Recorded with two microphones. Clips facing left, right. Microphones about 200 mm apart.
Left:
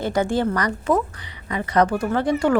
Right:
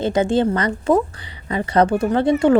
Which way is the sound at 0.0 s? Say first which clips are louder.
Right 4 dB; 20° right (ahead or behind).